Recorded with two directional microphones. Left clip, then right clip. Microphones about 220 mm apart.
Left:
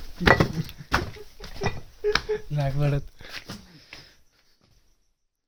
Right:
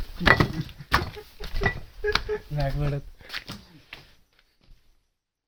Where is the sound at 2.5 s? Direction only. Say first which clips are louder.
Left 2 dB; 25° left (ahead or behind).